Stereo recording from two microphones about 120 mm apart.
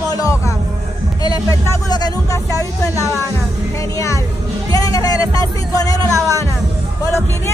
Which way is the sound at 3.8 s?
25° left (ahead or behind).